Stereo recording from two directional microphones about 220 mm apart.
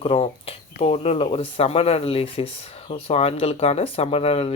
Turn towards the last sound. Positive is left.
turn(degrees=25)  # may be behind; listen again after turning